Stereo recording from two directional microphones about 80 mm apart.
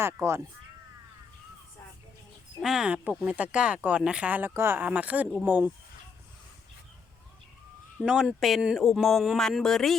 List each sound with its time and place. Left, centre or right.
0.0 s speech: right
2.6 s speech: centre
3.2 s speech: centre
4.8 s speech: centre
8.0 s speech: centre